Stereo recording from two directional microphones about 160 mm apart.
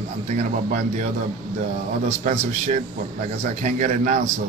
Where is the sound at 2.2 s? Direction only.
50° right (ahead or behind).